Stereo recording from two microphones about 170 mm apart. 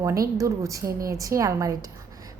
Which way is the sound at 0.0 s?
20° right (ahead or behind).